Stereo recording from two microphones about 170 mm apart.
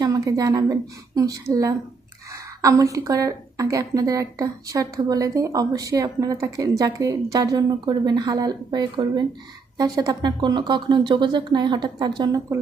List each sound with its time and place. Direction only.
0.0 s a woman's voice: 20° right (ahead or behind)